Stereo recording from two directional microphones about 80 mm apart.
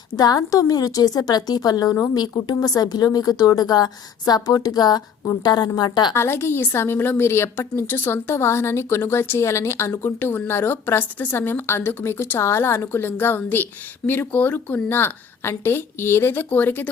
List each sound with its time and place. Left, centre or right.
0.2 s a woman's voice: left
2.1 s a woman's voice: left
2.6 s a woman's voice: left
6.1 s a woman's voice: left